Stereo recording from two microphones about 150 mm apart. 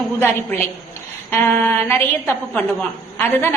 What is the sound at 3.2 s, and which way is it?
Speech, 15° left (ahead or behind).